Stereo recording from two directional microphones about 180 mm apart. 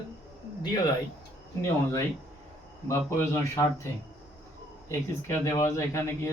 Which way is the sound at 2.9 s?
15° left (ahead or behind).